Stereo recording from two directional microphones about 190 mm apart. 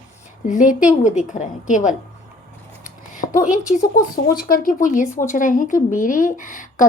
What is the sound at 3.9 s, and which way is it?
A woman's voice, 50° left (ahead or behind).